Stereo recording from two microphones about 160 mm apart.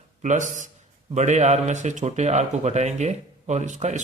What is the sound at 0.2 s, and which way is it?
Speech, 50° right (ahead or behind).